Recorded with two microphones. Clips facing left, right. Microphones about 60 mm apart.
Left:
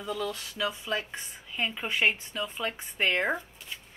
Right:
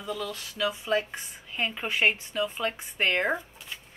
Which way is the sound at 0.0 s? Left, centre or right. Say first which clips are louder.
Left 1 dB; left.